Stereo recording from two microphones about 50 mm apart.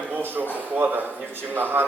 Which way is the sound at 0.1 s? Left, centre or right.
Right.